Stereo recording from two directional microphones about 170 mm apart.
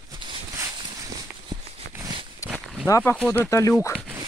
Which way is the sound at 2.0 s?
25° right (ahead or behind).